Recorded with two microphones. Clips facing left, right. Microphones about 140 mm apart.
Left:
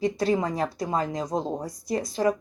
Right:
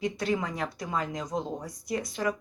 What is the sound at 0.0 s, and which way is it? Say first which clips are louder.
Speech: left 5 dB; 35° left (ahead or behind).